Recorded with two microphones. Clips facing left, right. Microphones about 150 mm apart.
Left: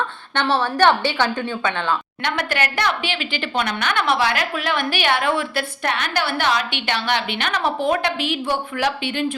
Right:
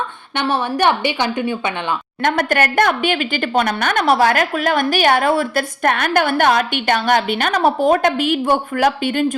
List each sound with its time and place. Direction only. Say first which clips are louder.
0.3 s a woman's voice: even; 15° right (ahead or behind)
2.2 s a woman's voice: right 8 dB; 45° right (ahead or behind)